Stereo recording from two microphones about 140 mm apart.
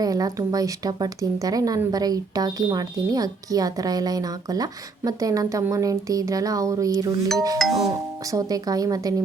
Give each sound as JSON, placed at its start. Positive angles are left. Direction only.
{"t": 0.0, "sound": "speech", "side_deg": -25}
{"t": 7.6, "sound": "speech", "side_deg": 0}
{"t": 8.3, "sound": "speech", "side_deg": -25}